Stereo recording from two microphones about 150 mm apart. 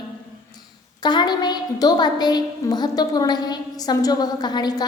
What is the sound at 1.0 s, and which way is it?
A woman's voice, 30° left (ahead or behind).